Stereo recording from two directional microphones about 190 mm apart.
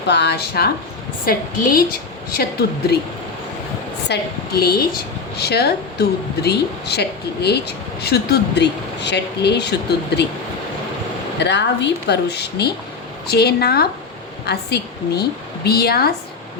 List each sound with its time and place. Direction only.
0.1 s a woman's voice: 65° left (ahead or behind)
4.1 s speech: 55° left (ahead or behind)
11.3 s speech: 70° left (ahead or behind)